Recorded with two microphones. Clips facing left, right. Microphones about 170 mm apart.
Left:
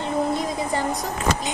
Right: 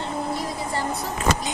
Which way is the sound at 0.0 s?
20° left (ahead or behind).